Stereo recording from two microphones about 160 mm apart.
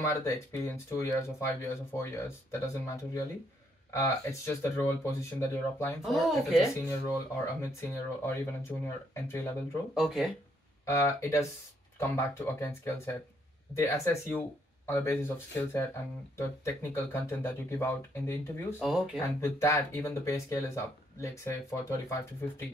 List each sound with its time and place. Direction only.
0.0 s speech: 15° left (ahead or behind)
3.9 s speech: 15° left (ahead or behind)
6.0 s speech: centre (ahead or behind)
6.6 s speech: 20° left (ahead or behind)
9.9 s speech: centre (ahead or behind)
10.9 s speech: 15° left (ahead or behind)